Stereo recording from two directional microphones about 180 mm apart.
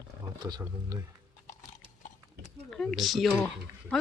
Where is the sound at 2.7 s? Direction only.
Centre (ahead or behind).